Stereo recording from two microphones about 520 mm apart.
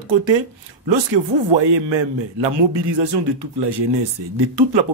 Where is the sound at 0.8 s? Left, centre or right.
Right.